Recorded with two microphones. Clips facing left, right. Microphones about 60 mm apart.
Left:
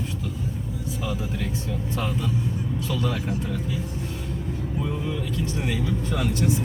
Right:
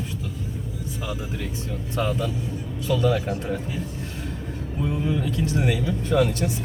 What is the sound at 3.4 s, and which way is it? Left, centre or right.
Speech, right.